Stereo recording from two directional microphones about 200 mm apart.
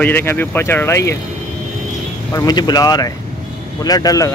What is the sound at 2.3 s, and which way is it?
Speech, 20° left (ahead or behind).